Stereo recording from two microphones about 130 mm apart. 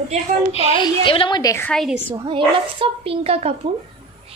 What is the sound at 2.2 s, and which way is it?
A woman's voice, 40° right (ahead or behind).